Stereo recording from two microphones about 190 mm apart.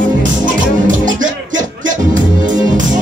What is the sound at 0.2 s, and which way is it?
Music, 45° right (ahead or behind).